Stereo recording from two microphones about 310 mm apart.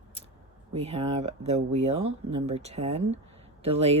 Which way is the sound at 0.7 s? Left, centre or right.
Centre.